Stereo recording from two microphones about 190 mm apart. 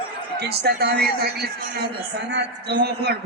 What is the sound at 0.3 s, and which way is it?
A man's voice, 60° right (ahead or behind).